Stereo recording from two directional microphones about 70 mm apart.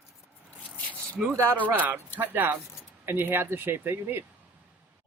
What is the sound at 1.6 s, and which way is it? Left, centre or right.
Speech, right.